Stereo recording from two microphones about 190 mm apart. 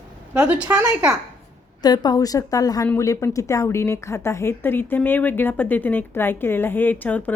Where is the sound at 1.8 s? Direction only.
20° left (ahead or behind).